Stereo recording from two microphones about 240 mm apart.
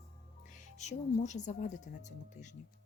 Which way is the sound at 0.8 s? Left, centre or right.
Left.